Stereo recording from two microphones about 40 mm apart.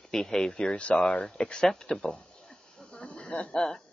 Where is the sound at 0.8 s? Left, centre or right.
Left.